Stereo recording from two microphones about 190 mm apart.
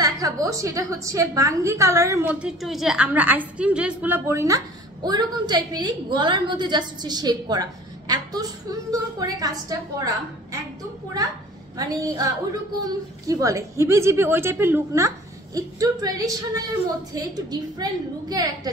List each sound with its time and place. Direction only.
0.0 s a woman's voice: 20° right (ahead or behind)
11.7 s a woman's voice: 20° right (ahead or behind)